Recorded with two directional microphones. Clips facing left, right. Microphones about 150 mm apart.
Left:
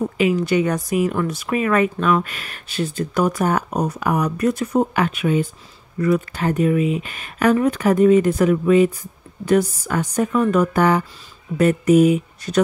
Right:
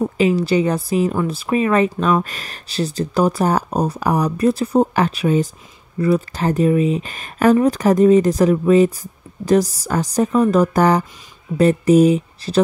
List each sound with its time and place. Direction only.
0.0 s speech: 35° right (ahead or behind)
2.2 s speech: 40° right (ahead or behind)